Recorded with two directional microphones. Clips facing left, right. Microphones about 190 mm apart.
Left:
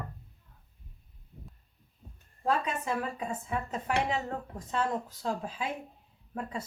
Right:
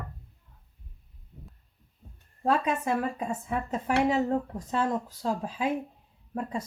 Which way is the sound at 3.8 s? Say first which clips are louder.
Right 8 dB; 35° right (ahead or behind).